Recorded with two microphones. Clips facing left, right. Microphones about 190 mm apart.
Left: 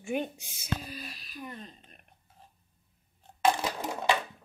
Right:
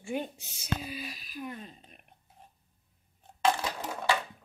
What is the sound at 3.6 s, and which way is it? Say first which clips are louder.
Coin: left 2 dB; 20° left (ahead or behind).